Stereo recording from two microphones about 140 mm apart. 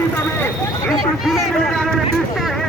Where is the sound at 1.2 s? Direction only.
Centre (ahead or behind).